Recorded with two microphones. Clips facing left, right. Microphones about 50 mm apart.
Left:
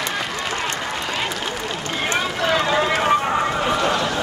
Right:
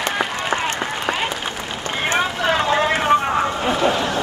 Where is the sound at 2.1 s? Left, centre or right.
Centre.